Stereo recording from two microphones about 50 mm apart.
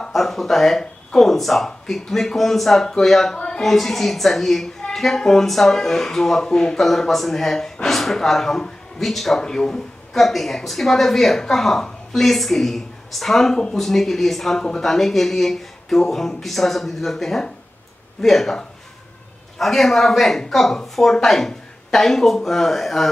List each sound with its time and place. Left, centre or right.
0.0 s speech: centre
3.3 s a sound: centre
3.6 s speech: centre
9.0 s speech: centre
19.6 s speech: centre